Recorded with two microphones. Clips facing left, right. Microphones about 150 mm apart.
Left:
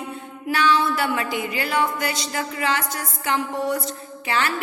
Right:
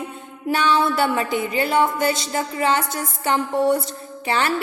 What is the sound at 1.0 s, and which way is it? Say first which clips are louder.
A woman's voice: right 3 dB; 25° right (ahead or behind).